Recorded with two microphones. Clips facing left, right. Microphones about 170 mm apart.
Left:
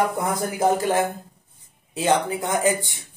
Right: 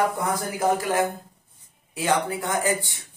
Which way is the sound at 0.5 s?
25° left (ahead or behind).